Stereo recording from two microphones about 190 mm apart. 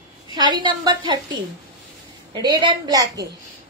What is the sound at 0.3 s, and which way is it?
A woman's voice, 20° right (ahead or behind).